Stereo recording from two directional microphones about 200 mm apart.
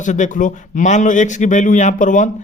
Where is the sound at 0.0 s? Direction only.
40° left (ahead or behind).